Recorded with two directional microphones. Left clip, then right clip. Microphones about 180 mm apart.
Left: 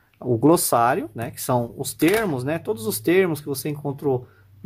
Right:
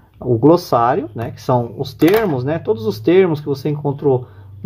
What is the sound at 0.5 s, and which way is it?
Speech, 20° left (ahead or behind).